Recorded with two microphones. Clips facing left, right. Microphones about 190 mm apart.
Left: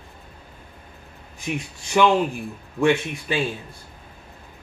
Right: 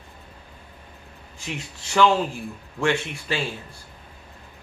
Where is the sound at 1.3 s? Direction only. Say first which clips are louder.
Left 5 dB; 15° left (ahead or behind).